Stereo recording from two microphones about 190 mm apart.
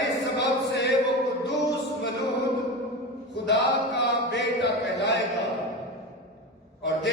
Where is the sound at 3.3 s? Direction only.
65° left (ahead or behind).